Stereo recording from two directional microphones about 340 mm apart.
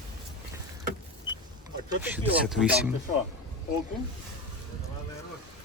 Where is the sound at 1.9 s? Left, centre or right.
Centre.